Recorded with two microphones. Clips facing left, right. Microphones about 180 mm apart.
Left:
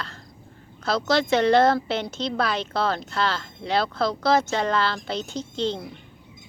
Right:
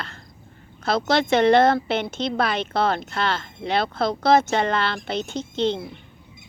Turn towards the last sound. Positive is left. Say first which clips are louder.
# right 3 dB
turn(degrees=-60)  # may be behind; listen again after turning